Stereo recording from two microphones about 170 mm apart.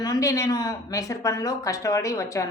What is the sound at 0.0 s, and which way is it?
Speech, 20° left (ahead or behind).